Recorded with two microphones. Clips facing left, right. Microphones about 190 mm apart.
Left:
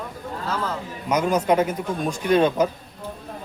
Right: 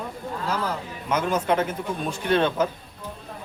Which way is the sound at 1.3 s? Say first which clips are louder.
Left 5 dB; 15° left (ahead or behind).